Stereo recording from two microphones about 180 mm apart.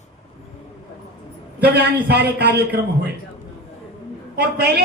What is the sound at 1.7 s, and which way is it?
Speech, 65° right (ahead or behind).